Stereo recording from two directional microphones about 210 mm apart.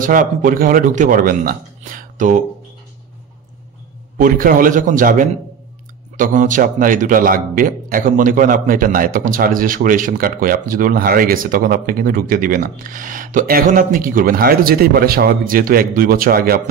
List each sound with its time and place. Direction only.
0.0 s a man's voice: 40° right (ahead or behind)
4.2 s a man's voice: 40° right (ahead or behind)